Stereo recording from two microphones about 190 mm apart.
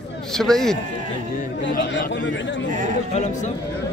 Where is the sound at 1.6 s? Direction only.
70° left (ahead or behind).